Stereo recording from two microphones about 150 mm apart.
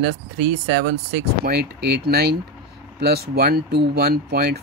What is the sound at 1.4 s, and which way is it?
Speech, 90° right.